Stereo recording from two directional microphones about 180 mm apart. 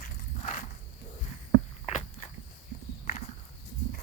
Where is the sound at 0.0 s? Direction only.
45° left (ahead or behind).